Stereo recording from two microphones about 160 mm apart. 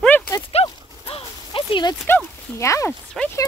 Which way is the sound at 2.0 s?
15° left (ahead or behind).